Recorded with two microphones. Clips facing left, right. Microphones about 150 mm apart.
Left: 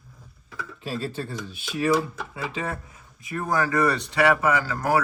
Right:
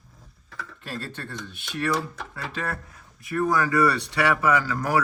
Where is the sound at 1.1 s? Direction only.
5° left (ahead or behind).